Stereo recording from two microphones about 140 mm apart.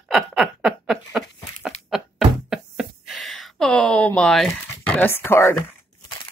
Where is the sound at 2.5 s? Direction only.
5° right (ahead or behind).